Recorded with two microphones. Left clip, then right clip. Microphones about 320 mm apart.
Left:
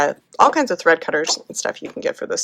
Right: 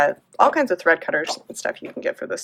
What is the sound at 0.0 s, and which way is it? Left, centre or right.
Speech, left.